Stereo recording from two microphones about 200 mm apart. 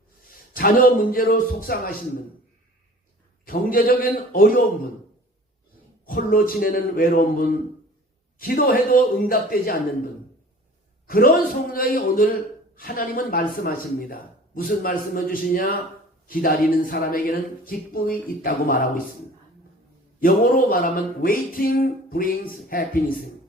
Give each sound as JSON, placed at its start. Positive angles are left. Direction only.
{"t": 0.5, "sound": "speech", "side_deg": 45}
{"t": 3.4, "sound": "speech", "side_deg": 45}
{"t": 6.1, "sound": "speech", "side_deg": 45}
{"t": 11.0, "sound": "a sound", "side_deg": 45}
{"t": 11.7, "sound": "speech", "side_deg": 45}
{"t": 20.1, "sound": "speech", "side_deg": 45}